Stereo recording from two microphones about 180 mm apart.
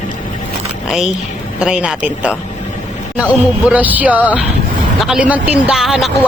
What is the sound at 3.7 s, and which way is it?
Speech, 10° right (ahead or behind).